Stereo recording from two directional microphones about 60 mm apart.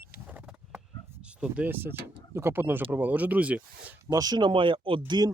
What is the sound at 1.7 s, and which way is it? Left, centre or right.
Speech, right.